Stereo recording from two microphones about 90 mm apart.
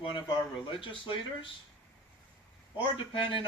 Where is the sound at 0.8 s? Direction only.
70° left (ahead or behind).